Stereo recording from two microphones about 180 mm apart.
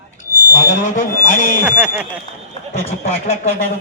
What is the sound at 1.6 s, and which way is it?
Speech, 10° right (ahead or behind).